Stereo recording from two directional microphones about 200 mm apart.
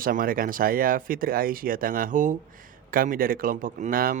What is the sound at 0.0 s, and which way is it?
A man's voice, 45° right (ahead or behind).